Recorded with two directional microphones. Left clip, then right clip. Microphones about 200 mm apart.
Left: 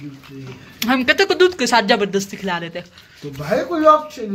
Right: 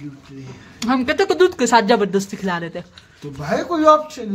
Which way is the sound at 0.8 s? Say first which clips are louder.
Left 3 dB; 10° right (ahead or behind).